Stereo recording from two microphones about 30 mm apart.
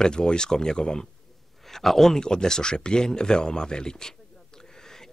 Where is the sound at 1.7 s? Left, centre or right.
Centre.